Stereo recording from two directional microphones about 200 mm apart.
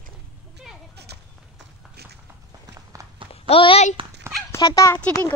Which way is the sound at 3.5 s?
30° left (ahead or behind).